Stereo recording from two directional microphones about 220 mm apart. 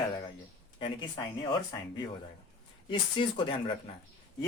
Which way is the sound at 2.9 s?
20° left (ahead or behind).